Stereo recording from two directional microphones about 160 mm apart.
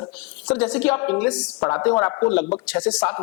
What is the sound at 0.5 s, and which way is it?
A man's voice, 5° left (ahead or behind).